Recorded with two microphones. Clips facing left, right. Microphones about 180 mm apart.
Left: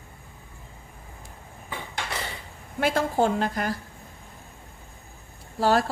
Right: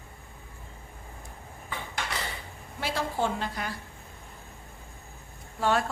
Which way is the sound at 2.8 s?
50° left (ahead or behind).